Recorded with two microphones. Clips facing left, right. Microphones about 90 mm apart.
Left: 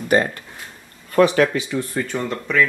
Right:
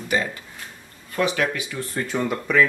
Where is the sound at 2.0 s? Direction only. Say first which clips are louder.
Left 1 dB; centre (ahead or behind).